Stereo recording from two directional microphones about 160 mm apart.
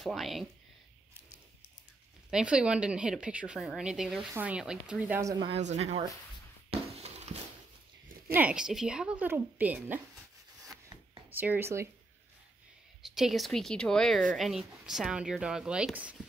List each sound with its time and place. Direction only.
0.0 s speech: centre (ahead or behind)
2.3 s a woman's voice: 5° right (ahead or behind)
5.2 s speech: 20° right (ahead or behind)
5.5 s speech: 45° right (ahead or behind)
6.7 s a sound: 45° right (ahead or behind)
8.3 s a woman's voice: 10° right (ahead or behind)
11.2 s a woman's voice: 10° right (ahead or behind)
13.0 s speech: centre (ahead or behind)